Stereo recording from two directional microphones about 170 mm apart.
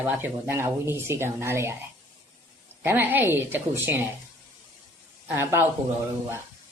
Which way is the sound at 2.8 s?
10° right (ahead or behind).